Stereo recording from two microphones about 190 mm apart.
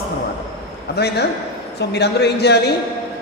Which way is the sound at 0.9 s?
60° left (ahead or behind).